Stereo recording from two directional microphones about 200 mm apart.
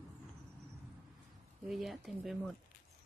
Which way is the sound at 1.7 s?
Centre (ahead or behind).